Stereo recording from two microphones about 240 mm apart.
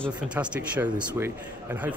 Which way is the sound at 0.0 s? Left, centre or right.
Centre.